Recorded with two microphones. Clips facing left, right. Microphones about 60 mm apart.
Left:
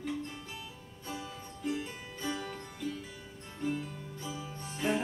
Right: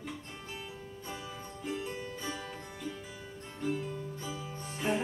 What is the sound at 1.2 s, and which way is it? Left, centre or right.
Music, centre.